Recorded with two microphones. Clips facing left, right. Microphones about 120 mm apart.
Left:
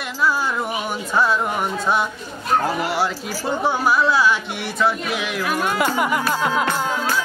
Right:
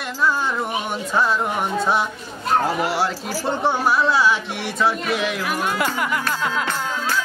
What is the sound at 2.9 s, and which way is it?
Speech, centre (ahead or behind).